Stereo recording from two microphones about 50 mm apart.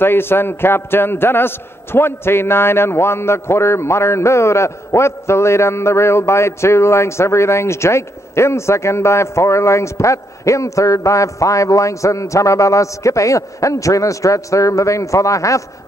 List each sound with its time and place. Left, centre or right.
0.0 s a man's voice: left